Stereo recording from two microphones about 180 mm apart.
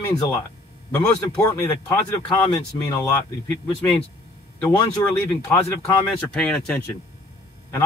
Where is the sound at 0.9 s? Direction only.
15° left (ahead or behind).